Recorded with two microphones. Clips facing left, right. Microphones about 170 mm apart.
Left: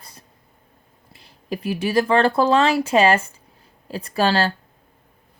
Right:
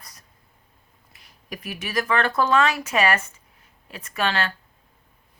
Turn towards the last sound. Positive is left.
turn(degrees=35)  # may be behind; listen again after turning